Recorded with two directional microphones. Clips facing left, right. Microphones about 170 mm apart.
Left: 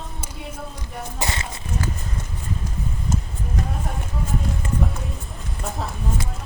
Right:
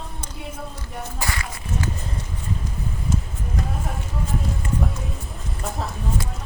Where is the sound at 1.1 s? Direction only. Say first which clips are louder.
Left 2 dB; 25° left (ahead or behind).